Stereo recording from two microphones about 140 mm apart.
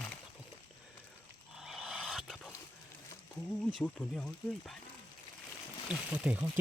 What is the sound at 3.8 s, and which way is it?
Speech, 5° left (ahead or behind).